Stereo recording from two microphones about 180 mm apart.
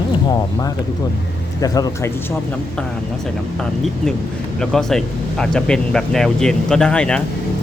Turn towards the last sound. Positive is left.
turn(degrees=5)  # may be behind; listen again after turning